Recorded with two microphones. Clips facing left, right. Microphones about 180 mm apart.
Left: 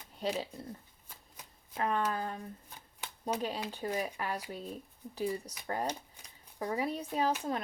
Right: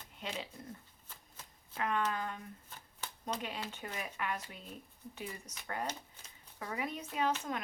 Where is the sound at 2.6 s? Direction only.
10° left (ahead or behind).